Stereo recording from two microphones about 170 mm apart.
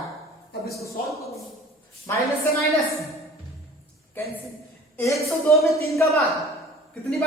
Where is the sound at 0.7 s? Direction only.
20° left (ahead or behind).